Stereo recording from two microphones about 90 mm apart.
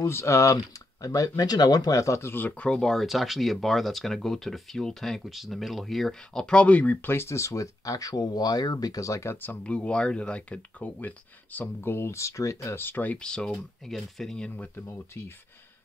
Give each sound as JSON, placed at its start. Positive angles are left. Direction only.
{"t": 0.0, "sound": "speech", "side_deg": 30}
{"t": 12.8, "sound": "speech", "side_deg": 20}
{"t": 14.6, "sound": "speech", "side_deg": 30}